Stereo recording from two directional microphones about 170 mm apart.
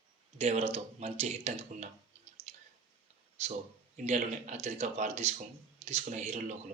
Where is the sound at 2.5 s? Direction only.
40° right (ahead or behind).